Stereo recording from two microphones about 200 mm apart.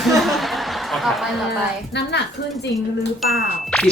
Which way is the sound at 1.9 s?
60° left (ahead or behind).